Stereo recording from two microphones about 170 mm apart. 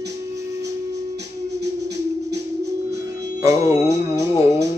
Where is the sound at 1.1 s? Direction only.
80° right.